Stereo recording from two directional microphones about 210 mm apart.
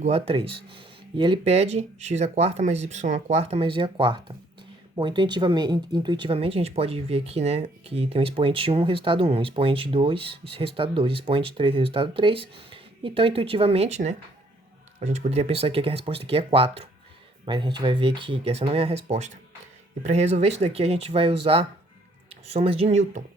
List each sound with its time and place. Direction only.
0.0 s speech: 25° right (ahead or behind)